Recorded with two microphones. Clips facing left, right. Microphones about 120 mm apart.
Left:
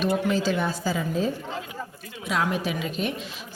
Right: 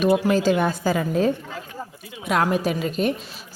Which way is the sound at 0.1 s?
90° right.